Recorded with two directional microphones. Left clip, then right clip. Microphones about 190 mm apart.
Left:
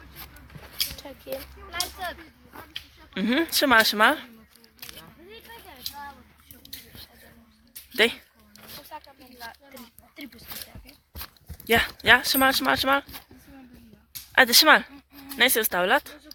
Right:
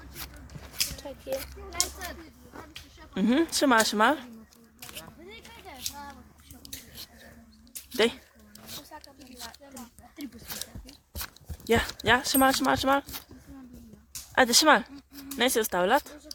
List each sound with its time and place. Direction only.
0.9 s a sound: 15° left (ahead or behind)
3.2 s speech: 15° right (ahead or behind)
7.9 s speech: 10° right (ahead or behind)
8.9 s a sound: 30° left (ahead or behind)
11.6 s speech: 10° right (ahead or behind)
14.3 s speech: 15° right (ahead or behind)